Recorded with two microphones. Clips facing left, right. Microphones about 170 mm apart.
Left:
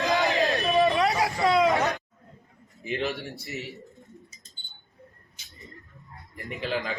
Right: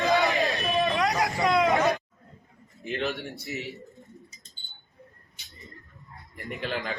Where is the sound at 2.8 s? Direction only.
Centre (ahead or behind).